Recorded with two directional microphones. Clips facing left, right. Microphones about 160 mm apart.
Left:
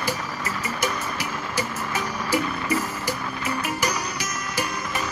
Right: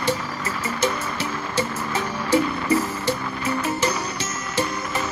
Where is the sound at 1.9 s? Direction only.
25° right (ahead or behind).